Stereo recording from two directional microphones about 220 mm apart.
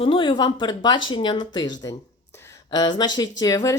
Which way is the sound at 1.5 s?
20° left (ahead or behind).